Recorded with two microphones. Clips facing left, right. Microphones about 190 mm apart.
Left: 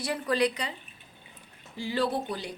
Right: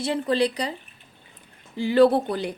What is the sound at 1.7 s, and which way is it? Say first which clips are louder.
Speech: right 11 dB; 60° right (ahead or behind).